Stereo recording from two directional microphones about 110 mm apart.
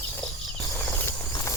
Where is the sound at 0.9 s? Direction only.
15° left (ahead or behind).